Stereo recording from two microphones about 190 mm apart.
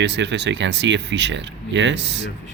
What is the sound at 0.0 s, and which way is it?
Speech, 65° right (ahead or behind).